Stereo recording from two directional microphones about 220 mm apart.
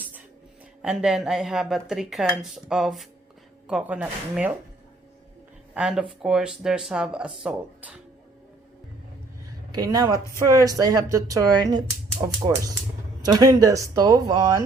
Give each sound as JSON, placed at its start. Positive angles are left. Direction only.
{"t": 0.8, "sound": "speech", "side_deg": -5}
{"t": 5.7, "sound": "speech", "side_deg": -5}
{"t": 9.7, "sound": "speech", "side_deg": -15}